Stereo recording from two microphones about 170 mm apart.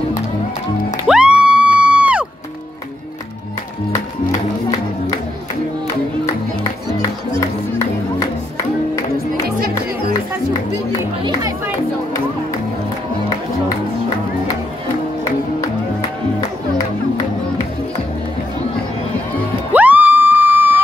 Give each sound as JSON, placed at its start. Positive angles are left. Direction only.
{"t": 1.0, "sound": "music", "side_deg": -5}
{"t": 6.2, "sound": "music", "side_deg": 15}
{"t": 19.7, "sound": "a sound", "side_deg": -10}